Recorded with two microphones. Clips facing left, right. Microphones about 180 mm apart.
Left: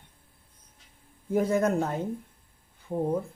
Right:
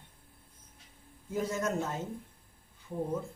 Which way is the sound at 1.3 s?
60° left (ahead or behind).